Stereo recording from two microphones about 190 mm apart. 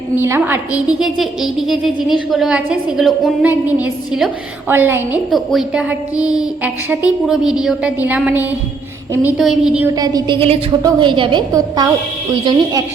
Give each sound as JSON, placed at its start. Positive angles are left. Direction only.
{"t": 0.2, "sound": "a woman's voice", "side_deg": -10}
{"t": 9.9, "sound": "a woman's voice", "side_deg": -20}